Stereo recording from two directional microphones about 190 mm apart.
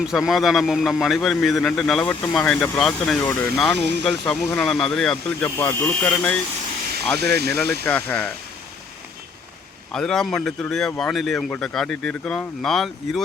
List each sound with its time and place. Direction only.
0.0 s speech: centre (ahead or behind)
7.2 s speech: 60° right (ahead or behind)
7.9 s speech: 10° left (ahead or behind)
9.9 s speech: 5° left (ahead or behind)